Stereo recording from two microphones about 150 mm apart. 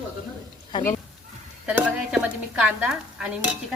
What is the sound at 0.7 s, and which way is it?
Speech, 30° left (ahead or behind).